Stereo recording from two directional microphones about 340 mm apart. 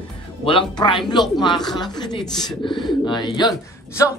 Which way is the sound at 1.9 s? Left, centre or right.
Centre.